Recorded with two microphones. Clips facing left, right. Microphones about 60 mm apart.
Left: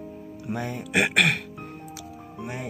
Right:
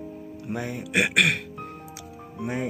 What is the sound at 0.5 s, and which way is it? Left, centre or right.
Speech, centre.